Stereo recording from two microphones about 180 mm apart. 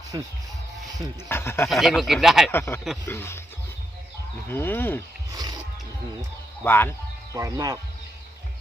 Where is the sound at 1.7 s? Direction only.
Centre (ahead or behind).